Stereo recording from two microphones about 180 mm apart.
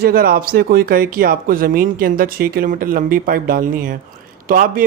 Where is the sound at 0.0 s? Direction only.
55° right (ahead or behind).